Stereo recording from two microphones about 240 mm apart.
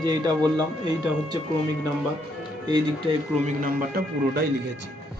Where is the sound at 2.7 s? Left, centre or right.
Centre.